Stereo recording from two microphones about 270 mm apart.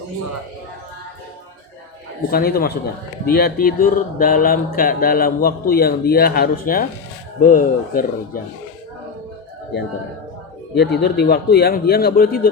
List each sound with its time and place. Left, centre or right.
2.3 s mantra: left
10.8 s mantra: left